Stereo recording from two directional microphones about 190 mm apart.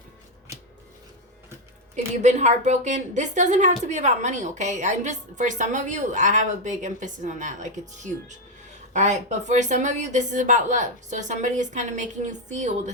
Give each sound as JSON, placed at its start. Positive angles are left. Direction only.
{"t": 2.2, "sound": "a woman's voice", "side_deg": -40}